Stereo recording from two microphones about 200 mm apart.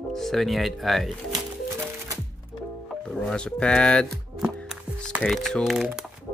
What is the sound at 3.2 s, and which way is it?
Speech, 5° left (ahead or behind).